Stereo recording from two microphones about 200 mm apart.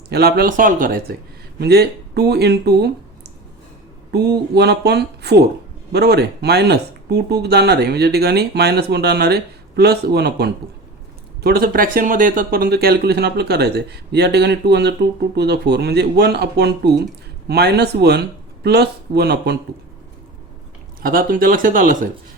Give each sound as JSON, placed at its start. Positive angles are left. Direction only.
{"t": 0.1, "sound": "speech", "side_deg": -50}
{"t": 4.1, "sound": "speech", "side_deg": -55}
{"t": 21.0, "sound": "speech", "side_deg": -45}